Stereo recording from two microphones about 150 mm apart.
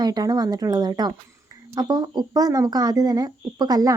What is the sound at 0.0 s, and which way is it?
Speech, 25° right (ahead or behind).